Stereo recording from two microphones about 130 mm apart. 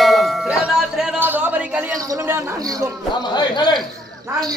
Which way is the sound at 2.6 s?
30° right (ahead or behind).